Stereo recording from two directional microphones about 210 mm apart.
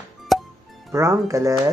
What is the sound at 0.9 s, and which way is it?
Speech, 15° right (ahead or behind).